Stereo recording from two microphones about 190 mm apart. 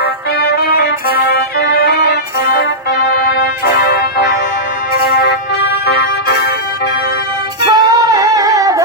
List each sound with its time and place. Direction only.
0.0 s music: 60° left (ahead or behind)
7.7 s music: 20° right (ahead or behind)